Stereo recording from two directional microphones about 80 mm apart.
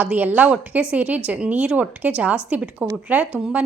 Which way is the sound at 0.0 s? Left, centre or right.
Centre.